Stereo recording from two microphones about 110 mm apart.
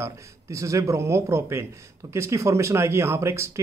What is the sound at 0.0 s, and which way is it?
Speech, 30° right (ahead or behind).